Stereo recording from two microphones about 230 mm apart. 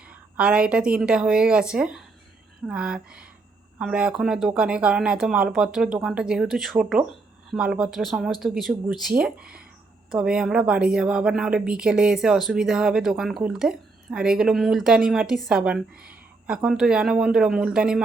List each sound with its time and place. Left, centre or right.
0.0 s a woman's voice: centre